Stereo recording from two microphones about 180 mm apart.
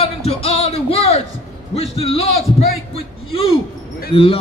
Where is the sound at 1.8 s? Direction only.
35° left (ahead or behind).